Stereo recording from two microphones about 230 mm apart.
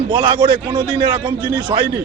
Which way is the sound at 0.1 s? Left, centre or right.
Centre.